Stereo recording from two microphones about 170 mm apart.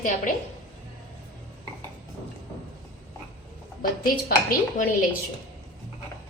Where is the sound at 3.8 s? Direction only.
55° left (ahead or behind).